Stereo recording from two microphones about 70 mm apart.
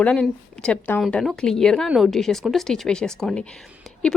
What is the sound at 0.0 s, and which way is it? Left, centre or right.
Speech, centre.